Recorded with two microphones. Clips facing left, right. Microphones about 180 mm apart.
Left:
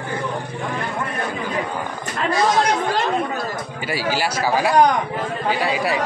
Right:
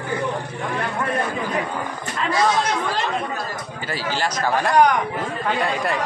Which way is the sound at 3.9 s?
10° left (ahead or behind).